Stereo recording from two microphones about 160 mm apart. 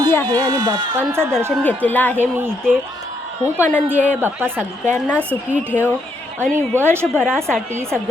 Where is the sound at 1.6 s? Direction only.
10° left (ahead or behind).